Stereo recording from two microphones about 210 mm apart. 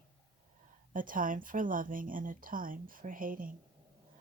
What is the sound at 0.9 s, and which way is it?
Speech, 40° right (ahead or behind).